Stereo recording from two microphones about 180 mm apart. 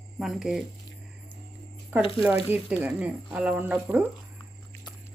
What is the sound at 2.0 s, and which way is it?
Speech, 30° left (ahead or behind).